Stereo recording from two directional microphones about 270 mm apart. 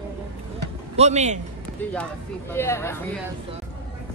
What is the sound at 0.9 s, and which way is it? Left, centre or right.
Speech, right.